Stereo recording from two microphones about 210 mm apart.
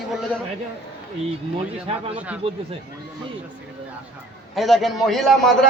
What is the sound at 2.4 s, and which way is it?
Speech, 25° right (ahead or behind).